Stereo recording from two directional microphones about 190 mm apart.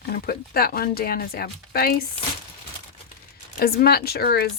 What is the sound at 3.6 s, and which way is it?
Speech, 55° left (ahead or behind).